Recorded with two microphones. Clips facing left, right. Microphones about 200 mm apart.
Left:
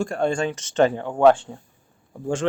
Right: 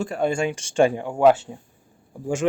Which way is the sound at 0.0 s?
5° right (ahead or behind).